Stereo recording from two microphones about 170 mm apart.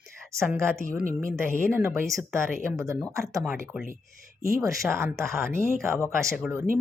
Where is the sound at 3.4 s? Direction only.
5° right (ahead or behind).